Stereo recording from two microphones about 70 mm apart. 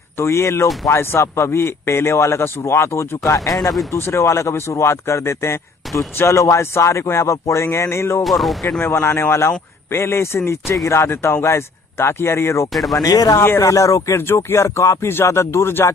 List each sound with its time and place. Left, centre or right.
0.2 s speech: left
8.2 s speech: centre
8.9 s speech: left
12.7 s speech: centre
13.0 s speech: left
13.6 s speech: left